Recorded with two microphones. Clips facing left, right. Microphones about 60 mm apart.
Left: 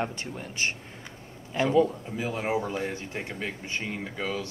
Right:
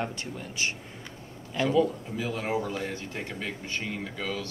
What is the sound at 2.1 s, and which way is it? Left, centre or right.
Speech, left.